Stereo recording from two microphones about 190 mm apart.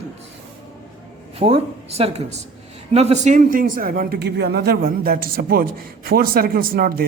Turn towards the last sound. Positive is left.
turn(degrees=-50)  # may be behind; listen again after turning